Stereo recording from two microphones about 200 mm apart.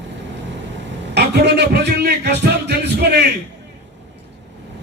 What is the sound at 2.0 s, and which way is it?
Music, 55° right (ahead or behind).